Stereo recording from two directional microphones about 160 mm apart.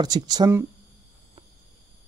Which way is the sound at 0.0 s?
25° right (ahead or behind).